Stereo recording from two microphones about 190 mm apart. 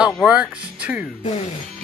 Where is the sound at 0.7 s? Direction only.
5° right (ahead or behind).